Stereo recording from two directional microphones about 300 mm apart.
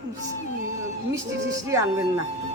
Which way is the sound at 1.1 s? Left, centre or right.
Centre.